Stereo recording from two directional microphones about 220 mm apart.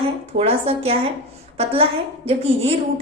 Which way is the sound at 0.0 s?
25° right (ahead or behind).